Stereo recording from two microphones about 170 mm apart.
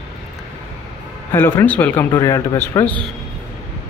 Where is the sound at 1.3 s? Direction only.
15° left (ahead or behind).